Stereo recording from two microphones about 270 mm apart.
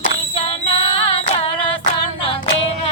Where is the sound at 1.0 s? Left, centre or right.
Left.